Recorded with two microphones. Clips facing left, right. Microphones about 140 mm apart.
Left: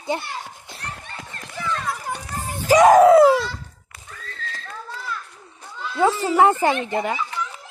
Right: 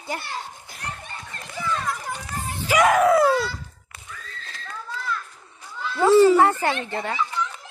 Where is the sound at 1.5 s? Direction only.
10° right (ahead or behind).